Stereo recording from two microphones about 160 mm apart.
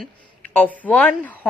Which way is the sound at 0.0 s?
10° left (ahead or behind).